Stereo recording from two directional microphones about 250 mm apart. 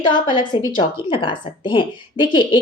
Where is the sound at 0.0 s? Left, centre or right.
Centre.